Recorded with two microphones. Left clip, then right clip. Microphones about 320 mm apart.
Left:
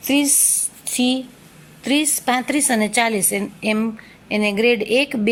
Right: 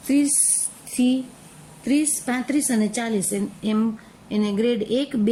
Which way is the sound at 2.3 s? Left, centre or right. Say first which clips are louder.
Left 6 dB; centre.